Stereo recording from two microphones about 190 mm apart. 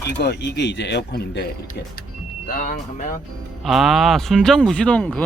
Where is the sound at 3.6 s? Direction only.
Centre (ahead or behind).